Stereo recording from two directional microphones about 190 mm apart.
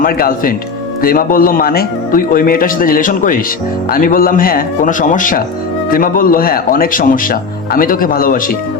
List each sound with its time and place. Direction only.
0.0 s a man's voice: 50° left (ahead or behind)